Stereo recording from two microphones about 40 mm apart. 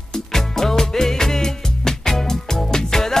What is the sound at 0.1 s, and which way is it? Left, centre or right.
Music, centre.